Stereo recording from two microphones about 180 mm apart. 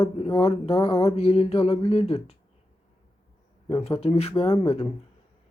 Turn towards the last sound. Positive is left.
turn(degrees=35)  # may be behind; listen again after turning